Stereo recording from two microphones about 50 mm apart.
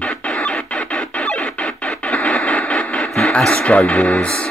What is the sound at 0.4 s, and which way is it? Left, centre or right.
Music, centre.